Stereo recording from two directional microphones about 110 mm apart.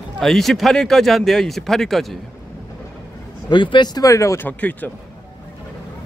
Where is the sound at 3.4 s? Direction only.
45° left (ahead or behind); by 4.5 s 30° left (ahead or behind).